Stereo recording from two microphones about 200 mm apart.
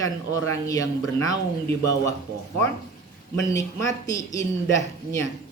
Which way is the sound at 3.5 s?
15° left (ahead or behind).